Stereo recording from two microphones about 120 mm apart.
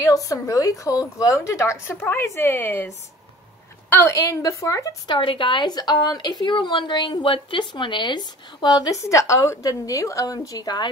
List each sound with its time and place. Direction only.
0.0 s a woman's voice: 25° left (ahead or behind)
3.9 s a woman's voice: 20° left (ahead or behind)
5.0 s a woman's voice: 45° left (ahead or behind)